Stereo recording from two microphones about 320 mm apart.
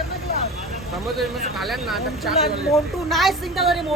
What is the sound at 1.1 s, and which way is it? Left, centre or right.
Speech, centre.